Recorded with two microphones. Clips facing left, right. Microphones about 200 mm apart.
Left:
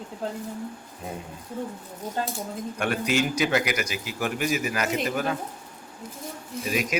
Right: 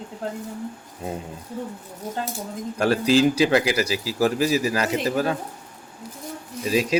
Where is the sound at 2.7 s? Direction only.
30° right (ahead or behind).